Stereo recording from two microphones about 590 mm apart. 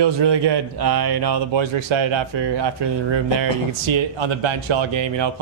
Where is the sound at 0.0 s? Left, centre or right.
Right.